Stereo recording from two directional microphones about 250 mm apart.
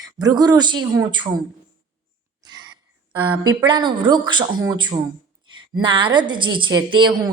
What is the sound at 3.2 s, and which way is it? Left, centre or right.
A woman's voice, centre.